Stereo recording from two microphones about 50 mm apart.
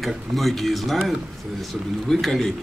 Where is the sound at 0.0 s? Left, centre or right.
Centre.